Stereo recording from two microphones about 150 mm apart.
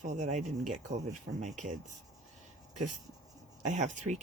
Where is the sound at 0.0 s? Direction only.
55° right (ahead or behind).